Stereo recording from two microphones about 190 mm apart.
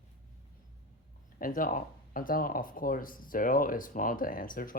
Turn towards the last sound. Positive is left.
turn(degrees=45)  # may be behind; listen again after turning